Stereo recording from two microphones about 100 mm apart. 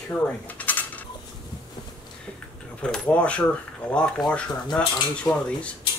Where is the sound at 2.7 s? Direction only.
10° left (ahead or behind).